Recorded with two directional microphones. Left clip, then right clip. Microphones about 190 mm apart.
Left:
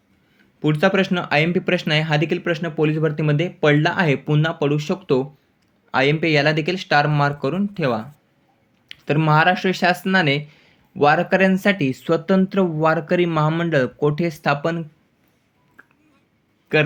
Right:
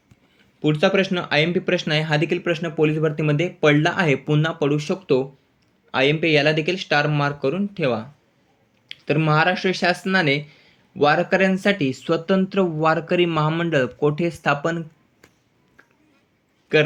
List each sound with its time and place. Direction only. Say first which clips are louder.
0.3 s speech: even; 20° left (ahead or behind)
16.7 s speech: even; 20° left (ahead or behind)